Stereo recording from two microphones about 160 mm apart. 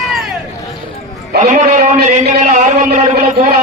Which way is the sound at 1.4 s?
50° right (ahead or behind).